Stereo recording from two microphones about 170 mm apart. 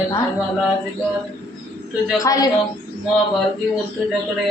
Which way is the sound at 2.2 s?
20° left (ahead or behind).